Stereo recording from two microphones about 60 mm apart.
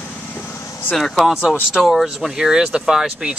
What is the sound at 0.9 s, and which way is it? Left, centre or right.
Speech, centre.